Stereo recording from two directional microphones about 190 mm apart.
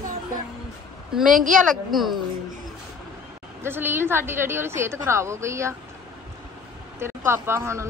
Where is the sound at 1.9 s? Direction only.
Centre (ahead or behind).